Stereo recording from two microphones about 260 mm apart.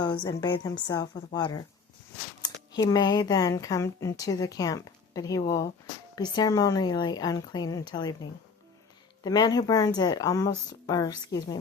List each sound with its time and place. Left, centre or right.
0.0 s speech: centre